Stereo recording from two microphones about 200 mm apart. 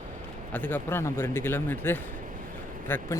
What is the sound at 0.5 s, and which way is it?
A man's voice, 10° left (ahead or behind).